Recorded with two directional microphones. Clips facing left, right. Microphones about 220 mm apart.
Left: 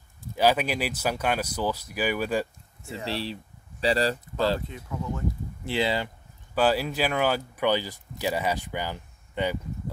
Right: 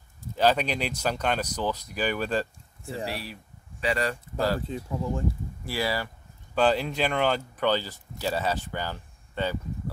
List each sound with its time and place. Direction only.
0.4 s speech: 10° left (ahead or behind)
3.1 s speech: 25° left (ahead or behind)
4.6 s speech: 30° right (ahead or behind)
5.7 s speech: 20° left (ahead or behind)
6.5 s speech: 5° left (ahead or behind)